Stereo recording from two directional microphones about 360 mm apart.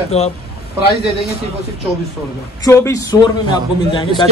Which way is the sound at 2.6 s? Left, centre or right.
Centre.